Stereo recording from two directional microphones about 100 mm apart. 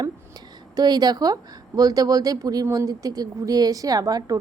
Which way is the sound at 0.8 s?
40° right (ahead or behind).